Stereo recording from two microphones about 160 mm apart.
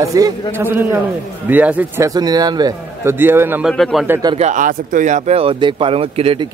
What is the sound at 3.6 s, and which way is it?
Speech, centre (ahead or behind).